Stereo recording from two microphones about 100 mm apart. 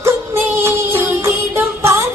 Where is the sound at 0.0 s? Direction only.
25° right (ahead or behind).